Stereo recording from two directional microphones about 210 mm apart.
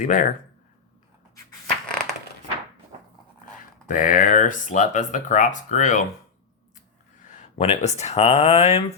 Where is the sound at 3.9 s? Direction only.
40° left (ahead or behind).